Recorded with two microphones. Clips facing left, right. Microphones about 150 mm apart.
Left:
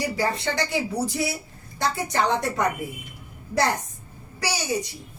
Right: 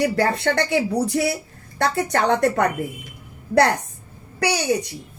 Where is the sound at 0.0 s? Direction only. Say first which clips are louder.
Right 6 dB; 60° right (ahead or behind).